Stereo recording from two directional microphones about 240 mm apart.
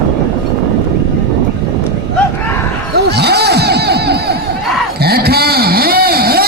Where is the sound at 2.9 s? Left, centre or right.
Right.